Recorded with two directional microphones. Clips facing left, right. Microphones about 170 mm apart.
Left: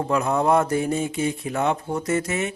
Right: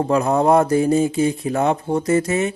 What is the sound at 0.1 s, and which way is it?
Speech, 35° right (ahead or behind).